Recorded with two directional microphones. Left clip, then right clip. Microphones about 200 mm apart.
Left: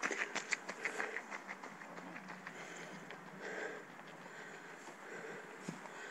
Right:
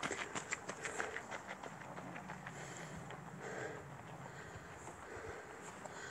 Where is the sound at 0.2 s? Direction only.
45° right (ahead or behind).